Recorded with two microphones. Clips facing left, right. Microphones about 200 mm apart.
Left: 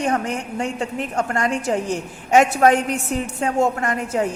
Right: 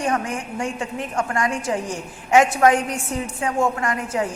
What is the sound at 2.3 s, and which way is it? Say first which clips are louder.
A woman's voice: left 1 dB; 40° left (ahead or behind).